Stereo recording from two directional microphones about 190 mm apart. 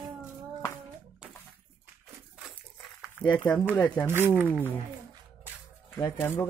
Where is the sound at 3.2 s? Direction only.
10° left (ahead or behind).